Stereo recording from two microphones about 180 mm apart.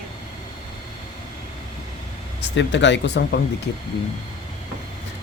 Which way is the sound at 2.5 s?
80° left.